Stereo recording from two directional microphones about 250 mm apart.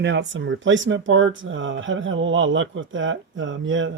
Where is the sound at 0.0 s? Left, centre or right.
Right.